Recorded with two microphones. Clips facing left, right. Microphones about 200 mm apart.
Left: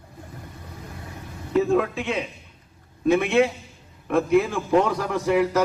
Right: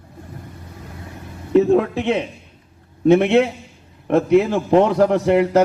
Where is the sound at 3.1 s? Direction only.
60° right (ahead or behind).